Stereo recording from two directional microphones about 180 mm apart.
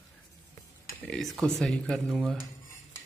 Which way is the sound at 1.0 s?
Centre (ahead or behind).